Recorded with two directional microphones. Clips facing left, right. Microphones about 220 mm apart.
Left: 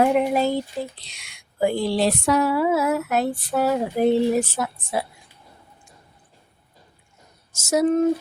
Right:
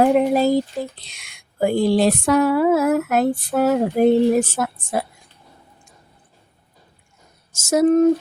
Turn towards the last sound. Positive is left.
turn(degrees=-50)  # may be behind; listen again after turning